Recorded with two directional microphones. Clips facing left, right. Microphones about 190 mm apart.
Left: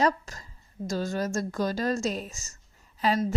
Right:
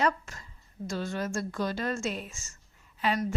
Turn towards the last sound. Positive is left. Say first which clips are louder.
# left 3 dB
turn(degrees=40)  # may be behind; listen again after turning